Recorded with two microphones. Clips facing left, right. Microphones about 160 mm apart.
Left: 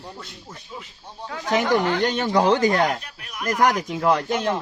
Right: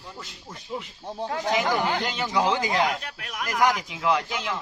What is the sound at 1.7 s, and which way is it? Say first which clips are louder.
Speech: left 6 dB; 50° left (ahead or behind).